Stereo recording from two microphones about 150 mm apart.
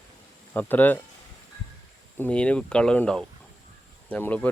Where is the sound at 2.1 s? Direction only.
10° left (ahead or behind).